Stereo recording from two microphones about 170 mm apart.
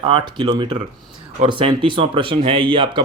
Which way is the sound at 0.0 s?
30° right (ahead or behind).